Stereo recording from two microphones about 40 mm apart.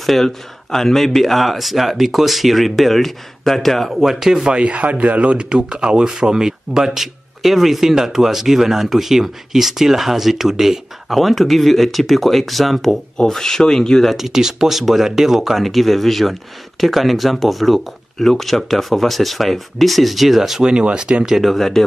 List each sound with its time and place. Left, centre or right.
0.0 s speech: centre
3.9 s speech: centre
4.5 s speech: right; by 12.9 s centre
13.3 s speech: centre
14.1 s speech: centre
20.6 s speech: right
21.4 s speech: centre